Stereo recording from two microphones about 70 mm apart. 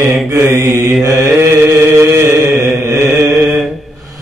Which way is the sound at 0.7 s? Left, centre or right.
Right.